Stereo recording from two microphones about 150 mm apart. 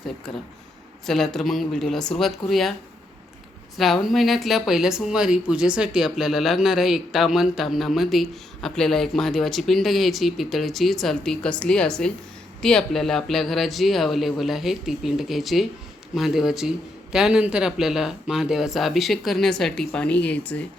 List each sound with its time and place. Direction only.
0.3 s speech: centre (ahead or behind)
3.8 s speech: centre (ahead or behind)